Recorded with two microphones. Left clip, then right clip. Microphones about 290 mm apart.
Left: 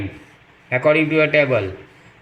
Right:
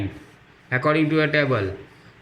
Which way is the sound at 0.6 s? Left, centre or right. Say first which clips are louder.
Left 5 dB; centre.